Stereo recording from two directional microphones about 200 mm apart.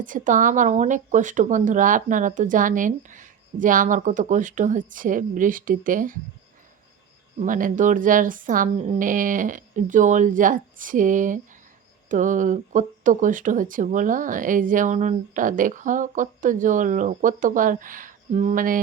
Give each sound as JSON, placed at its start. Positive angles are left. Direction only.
{"t": 0.0, "sound": "speech", "side_deg": -40}
{"t": 7.3, "sound": "speech", "side_deg": -40}